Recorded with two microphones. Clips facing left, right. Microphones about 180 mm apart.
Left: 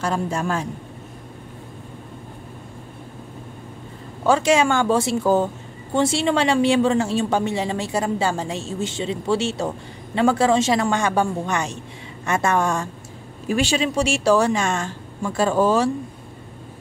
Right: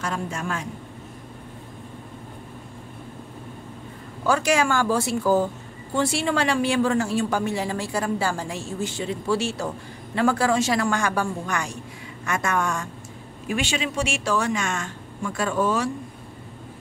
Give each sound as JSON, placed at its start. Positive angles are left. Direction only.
{"t": 0.0, "sound": "speech", "side_deg": 35}
{"t": 4.3, "sound": "speech", "side_deg": 25}